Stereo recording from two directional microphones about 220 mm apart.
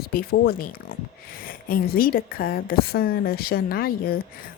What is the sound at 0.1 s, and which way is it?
A woman's voice, 45° left (ahead or behind).